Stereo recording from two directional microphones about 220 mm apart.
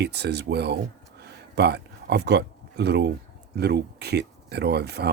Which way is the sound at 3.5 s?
50° right (ahead or behind).